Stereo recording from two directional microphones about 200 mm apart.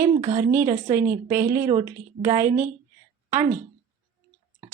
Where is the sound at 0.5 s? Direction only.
10° right (ahead or behind).